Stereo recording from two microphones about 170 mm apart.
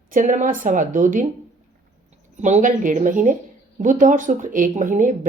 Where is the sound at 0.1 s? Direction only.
50° right (ahead or behind).